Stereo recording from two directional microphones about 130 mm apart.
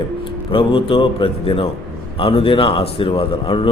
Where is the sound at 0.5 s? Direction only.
40° left (ahead or behind).